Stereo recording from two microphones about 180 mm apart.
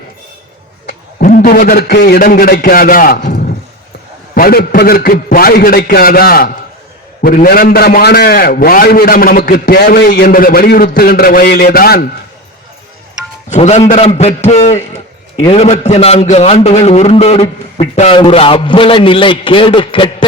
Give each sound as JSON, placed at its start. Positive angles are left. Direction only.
{"t": 0.9, "sound": "a sound", "side_deg": 55}
{"t": 1.4, "sound": "a man's voice", "side_deg": 55}
{"t": 13.5, "sound": "a man's voice", "side_deg": 40}